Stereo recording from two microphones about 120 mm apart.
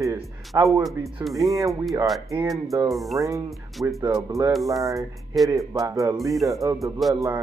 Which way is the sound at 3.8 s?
25° right (ahead or behind).